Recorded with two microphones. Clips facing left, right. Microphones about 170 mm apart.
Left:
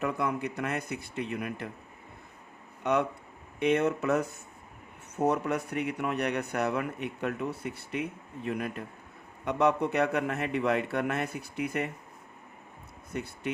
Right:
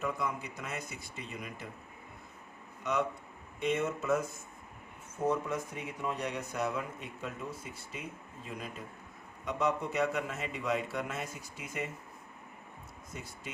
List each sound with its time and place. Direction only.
0.0 s a man's voice: 60° left (ahead or behind)
2.8 s a man's voice: 60° left (ahead or behind)
13.1 s a man's voice: 65° left (ahead or behind)